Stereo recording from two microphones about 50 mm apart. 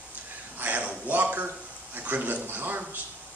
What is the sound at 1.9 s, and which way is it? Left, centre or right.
A man's voice, right.